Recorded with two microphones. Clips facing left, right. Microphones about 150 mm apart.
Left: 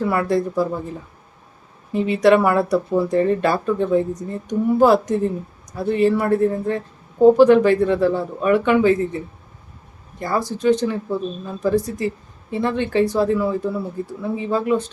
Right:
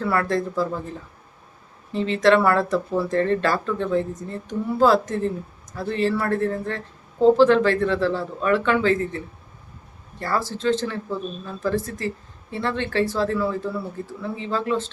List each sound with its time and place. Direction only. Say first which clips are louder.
0.0 s speech: left 3 dB; 15° left (ahead or behind)
1.9 s speech: left 3 dB; 15° left (ahead or behind)